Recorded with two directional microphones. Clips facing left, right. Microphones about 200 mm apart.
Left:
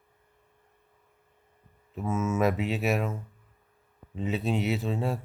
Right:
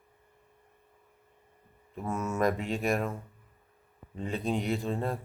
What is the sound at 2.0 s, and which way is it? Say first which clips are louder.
Speech: left 3 dB; centre (ahead or behind).